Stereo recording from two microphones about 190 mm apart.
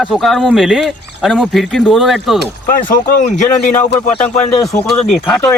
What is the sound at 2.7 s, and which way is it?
Speech, 45° left (ahead or behind).